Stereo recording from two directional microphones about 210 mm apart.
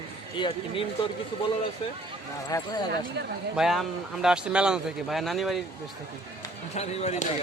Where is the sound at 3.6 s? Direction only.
Centre (ahead or behind).